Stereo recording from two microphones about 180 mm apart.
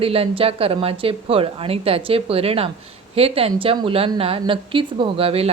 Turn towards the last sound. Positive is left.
turn(degrees=-30)  # may be behind; listen again after turning